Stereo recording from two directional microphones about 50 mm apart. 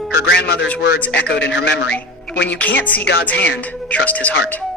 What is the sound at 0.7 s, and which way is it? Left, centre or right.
Speech, left.